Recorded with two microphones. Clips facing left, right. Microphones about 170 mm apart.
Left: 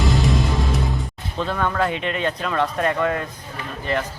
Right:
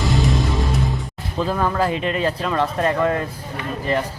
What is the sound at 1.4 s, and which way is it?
Speech, 5° right (ahead or behind).